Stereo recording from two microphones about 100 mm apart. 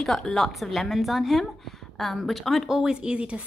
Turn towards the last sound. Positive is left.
turn(degrees=-10)  # may be behind; listen again after turning